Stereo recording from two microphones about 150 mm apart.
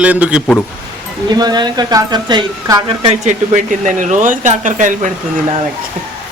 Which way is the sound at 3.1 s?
50° right (ahead or behind).